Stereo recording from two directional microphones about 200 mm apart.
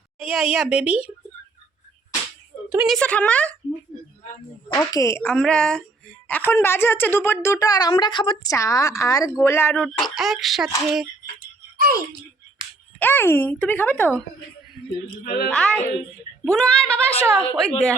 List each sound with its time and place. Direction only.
0.2 s speech: 5° right (ahead or behind)
2.7 s speech: centre (ahead or behind)
4.7 s speech: 15° left (ahead or behind)
9.8 s speech: centre (ahead or behind)
11.8 s speech: 45° right (ahead or behind)
13.0 s speech: 10° left (ahead or behind)
15.2 s a woman's voice: 50° left (ahead or behind)
15.4 s speech: 5° left (ahead or behind)
17.1 s a woman's voice: 30° left (ahead or behind)